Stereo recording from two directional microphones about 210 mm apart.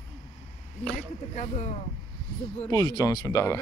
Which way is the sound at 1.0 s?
35° left (ahead or behind).